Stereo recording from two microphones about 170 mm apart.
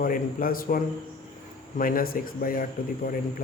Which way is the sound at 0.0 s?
55° left (ahead or behind).